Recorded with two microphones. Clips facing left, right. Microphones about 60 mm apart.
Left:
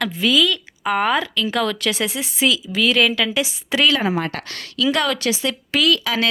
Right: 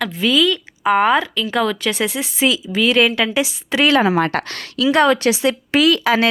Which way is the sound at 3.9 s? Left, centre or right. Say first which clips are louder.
Right 6 dB; right.